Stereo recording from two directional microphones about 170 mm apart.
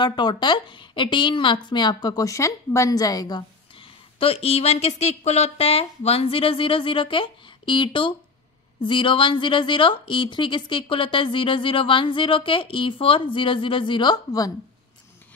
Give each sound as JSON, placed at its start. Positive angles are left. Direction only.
{"t": 0.0, "sound": "a woman's voice", "side_deg": 25}